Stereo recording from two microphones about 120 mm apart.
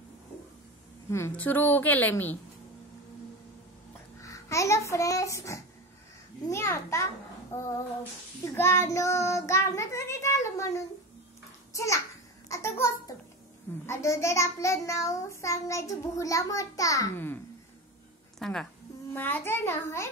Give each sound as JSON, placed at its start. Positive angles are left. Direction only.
{"t": 1.3, "sound": "a woman's voice", "side_deg": 15}
{"t": 4.2, "sound": "a child's voice", "side_deg": 25}
{"t": 12.4, "sound": "a sound", "side_deg": 25}
{"t": 13.8, "sound": "a child's voice", "side_deg": 25}
{"t": 18.4, "sound": "a woman's voice", "side_deg": 5}
{"t": 19.1, "sound": "a child's voice", "side_deg": 15}